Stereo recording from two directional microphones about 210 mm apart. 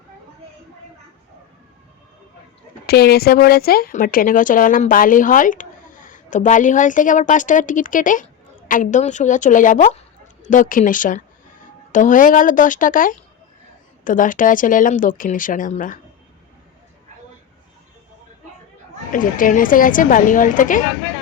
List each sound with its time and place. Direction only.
2.8 s speech: 50° left (ahead or behind)
19.1 s speech: 40° left (ahead or behind)